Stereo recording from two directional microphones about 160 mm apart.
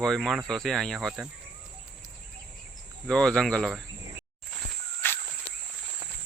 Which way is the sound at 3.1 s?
5° left (ahead or behind).